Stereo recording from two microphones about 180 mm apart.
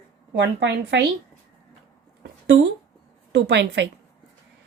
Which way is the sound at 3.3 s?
70° right (ahead or behind).